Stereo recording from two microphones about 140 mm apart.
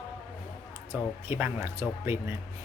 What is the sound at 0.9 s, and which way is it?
Speech, 15° right (ahead or behind).